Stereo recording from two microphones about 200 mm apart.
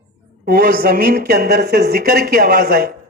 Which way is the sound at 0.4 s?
50° right (ahead or behind).